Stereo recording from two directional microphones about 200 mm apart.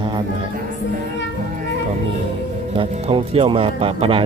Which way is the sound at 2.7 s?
25° right (ahead or behind).